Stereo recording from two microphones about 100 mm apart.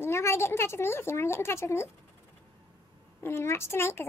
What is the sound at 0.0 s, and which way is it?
Speech, 25° left (ahead or behind).